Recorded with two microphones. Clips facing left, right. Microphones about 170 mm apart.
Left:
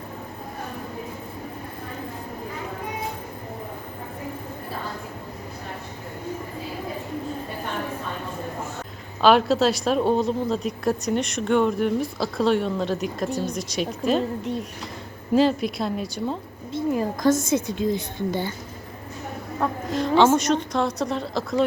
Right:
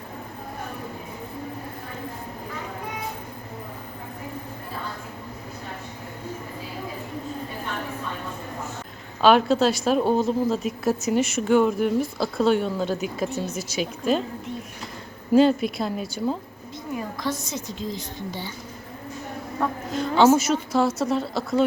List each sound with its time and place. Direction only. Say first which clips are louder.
9.2 s a woman's voice: even; centre (ahead or behind)
15.3 s a woman's voice: right 2 dB; centre (ahead or behind)
16.7 s a woman's voice: left 8 dB; 40° left (ahead or behind)
19.5 s a woman's voice: left 1 dB; centre (ahead or behind)